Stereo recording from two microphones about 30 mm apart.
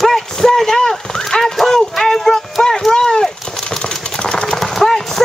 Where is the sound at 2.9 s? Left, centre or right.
Left.